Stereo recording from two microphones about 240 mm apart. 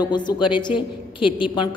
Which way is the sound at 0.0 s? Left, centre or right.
Centre.